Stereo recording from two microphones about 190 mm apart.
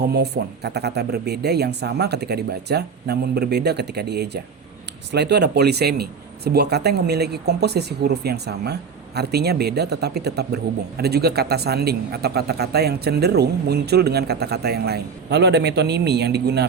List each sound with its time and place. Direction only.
0.0 s a man's voice: 60° right (ahead or behind)